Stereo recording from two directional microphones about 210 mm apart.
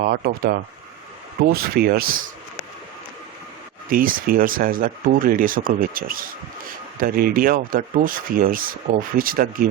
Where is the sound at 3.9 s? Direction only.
40° right (ahead or behind).